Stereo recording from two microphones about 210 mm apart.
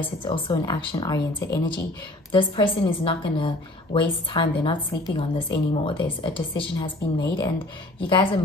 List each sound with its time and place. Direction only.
0.2 s a woman's voice: 25° left (ahead or behind)